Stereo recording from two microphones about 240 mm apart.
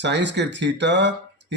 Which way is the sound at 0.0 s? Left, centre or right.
Right.